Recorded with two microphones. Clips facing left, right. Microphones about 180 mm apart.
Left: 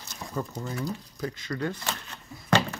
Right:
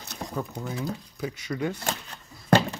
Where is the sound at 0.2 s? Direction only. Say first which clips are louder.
Right 4 dB; 40° right (ahead or behind).